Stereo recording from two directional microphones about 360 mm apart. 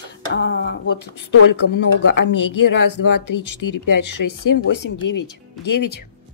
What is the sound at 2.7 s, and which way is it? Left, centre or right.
Speech, left.